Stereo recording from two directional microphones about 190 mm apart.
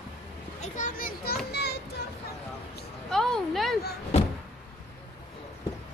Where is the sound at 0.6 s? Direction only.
45° left (ahead or behind); by 1.8 s 60° left (ahead or behind).